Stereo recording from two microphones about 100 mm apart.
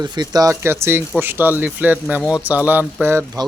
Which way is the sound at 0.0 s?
45° right (ahead or behind).